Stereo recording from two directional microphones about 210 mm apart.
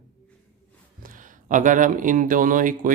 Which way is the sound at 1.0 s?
40° right (ahead or behind).